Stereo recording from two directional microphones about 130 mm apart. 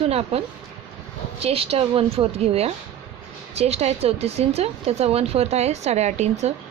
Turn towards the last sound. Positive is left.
turn(degrees=-60)  # may be behind; listen again after turning